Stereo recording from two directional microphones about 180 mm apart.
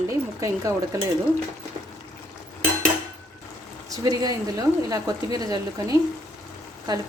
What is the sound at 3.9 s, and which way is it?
A woman's voice, 20° right (ahead or behind).